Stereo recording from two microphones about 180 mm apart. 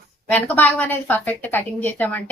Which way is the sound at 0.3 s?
10° left (ahead or behind).